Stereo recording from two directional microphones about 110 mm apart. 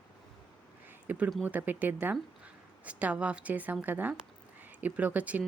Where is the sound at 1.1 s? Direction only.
15° right (ahead or behind).